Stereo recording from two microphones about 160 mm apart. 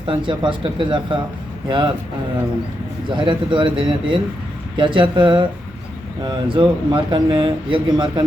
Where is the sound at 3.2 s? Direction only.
30° right (ahead or behind).